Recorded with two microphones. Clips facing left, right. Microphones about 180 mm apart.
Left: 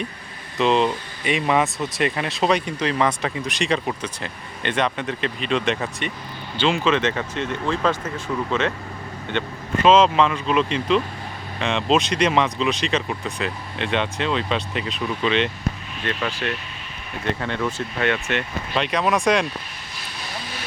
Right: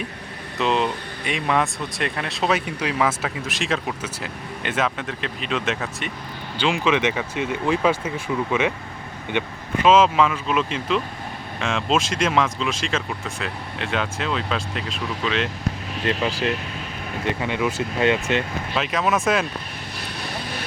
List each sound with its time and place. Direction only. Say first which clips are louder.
0.6 s speech: left 3 dB; centre (ahead or behind)
16.0 s speech: right 3 dB; 30° right (ahead or behind)
17.4 s speech: right 2 dB; 10° right (ahead or behind)